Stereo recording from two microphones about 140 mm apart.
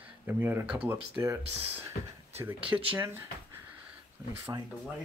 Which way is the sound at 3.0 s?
15° right (ahead or behind).